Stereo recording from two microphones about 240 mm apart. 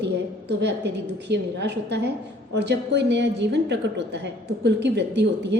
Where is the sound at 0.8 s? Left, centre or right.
Right.